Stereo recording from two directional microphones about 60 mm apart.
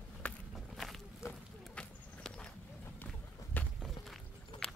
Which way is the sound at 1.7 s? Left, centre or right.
Centre.